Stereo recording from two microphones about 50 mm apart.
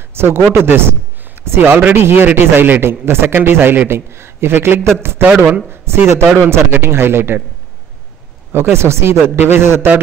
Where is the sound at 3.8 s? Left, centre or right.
Right.